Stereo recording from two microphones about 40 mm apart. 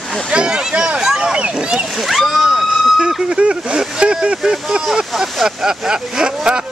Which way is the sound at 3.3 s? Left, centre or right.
Right.